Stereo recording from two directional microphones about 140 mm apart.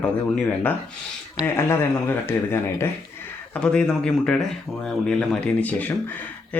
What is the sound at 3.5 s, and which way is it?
Speech, 5° left (ahead or behind).